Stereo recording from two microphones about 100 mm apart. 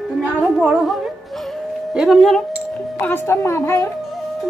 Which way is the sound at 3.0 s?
20° left (ahead or behind).